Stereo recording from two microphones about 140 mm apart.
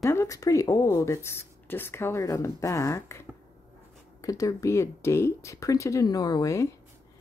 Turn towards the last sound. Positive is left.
turn(degrees=20)  # may be behind; listen again after turning